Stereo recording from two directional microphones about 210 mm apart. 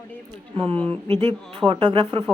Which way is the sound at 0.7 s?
5° left (ahead or behind).